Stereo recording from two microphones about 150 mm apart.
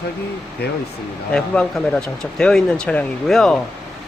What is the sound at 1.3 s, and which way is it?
Speech, 5° left (ahead or behind).